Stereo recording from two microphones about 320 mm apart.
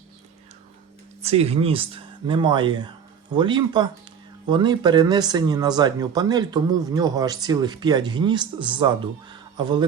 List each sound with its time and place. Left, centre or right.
1.2 s speech: centre